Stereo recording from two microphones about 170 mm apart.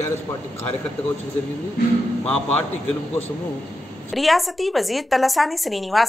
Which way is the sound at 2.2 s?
10° left (ahead or behind).